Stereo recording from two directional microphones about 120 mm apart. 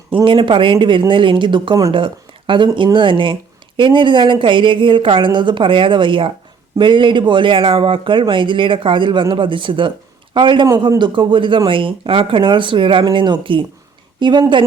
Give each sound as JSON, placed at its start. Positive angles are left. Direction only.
{"t": 0.3, "sound": "speech", "side_deg": -45}